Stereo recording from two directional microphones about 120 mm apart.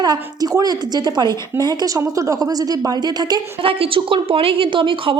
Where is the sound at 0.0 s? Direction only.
35° right (ahead or behind).